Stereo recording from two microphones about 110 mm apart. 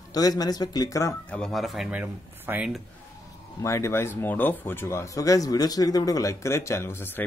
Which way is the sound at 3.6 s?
25° left (ahead or behind).